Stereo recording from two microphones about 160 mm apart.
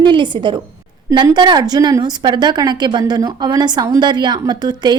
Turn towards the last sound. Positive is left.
turn(degrees=-25)  # may be behind; listen again after turning